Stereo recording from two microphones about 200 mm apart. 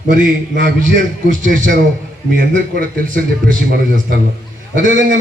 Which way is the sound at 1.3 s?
40° right (ahead or behind).